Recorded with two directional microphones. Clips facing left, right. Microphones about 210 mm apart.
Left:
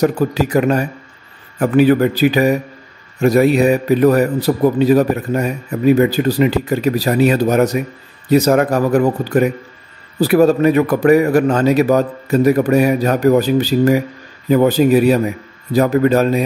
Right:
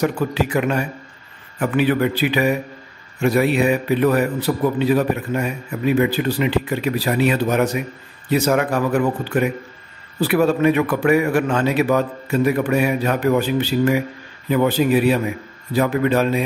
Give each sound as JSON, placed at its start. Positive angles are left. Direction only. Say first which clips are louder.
{"t": 0.0, "sound": "a man's voice", "louder": "left 5 dB", "side_deg": 40}